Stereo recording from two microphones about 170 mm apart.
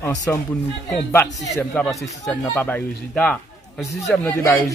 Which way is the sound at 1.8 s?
5° left (ahead or behind).